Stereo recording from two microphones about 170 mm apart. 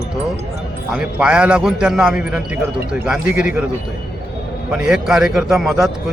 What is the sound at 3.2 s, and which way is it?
Speech, 60° left (ahead or behind).